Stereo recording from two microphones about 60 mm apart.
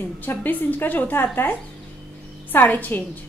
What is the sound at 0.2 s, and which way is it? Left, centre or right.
A woman's voice, left.